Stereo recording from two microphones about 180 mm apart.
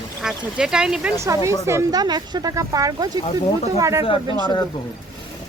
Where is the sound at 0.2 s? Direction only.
5° right (ahead or behind).